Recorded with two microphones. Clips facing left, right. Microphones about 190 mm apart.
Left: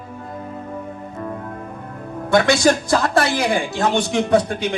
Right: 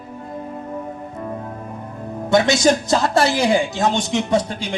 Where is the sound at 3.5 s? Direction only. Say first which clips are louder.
Right 1 dB; 60° left (ahead or behind).